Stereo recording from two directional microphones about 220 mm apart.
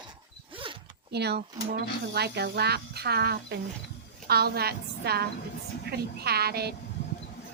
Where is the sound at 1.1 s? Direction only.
50° right (ahead or behind).